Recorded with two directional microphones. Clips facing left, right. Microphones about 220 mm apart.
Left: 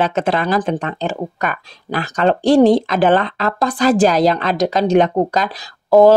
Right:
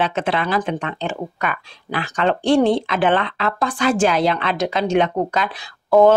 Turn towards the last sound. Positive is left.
turn(degrees=35)  # may be behind; listen again after turning